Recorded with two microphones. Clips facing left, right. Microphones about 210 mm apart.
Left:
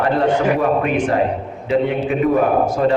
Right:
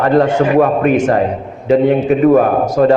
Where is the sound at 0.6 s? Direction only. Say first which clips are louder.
Right 6 dB; 45° right (ahead or behind).